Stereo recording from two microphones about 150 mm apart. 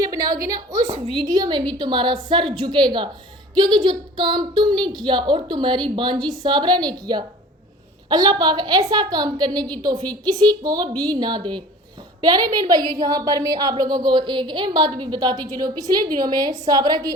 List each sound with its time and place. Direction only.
0.0 s a woman's voice: 25° right (ahead or behind)